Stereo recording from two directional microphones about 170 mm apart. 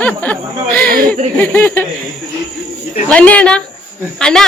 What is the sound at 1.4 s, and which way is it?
Speech, 10° left (ahead or behind).